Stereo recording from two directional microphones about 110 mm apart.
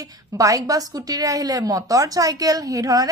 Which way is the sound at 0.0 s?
30° right (ahead or behind).